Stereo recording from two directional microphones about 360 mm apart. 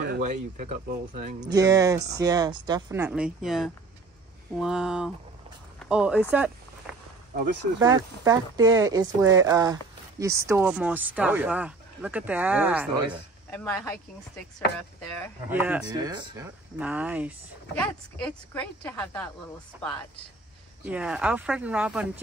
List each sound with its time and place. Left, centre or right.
0.1 s speech: right
1.2 s speech: centre
5.8 s a sound: centre
7.8 s speech: centre
15.5 s speech: centre